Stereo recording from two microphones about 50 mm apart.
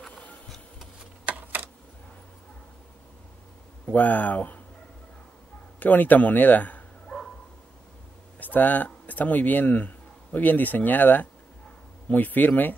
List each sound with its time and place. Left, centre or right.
1.3 s a sound: right
3.9 s speech: left
5.8 s speech: left
7.1 s dog: centre
8.4 s speech: left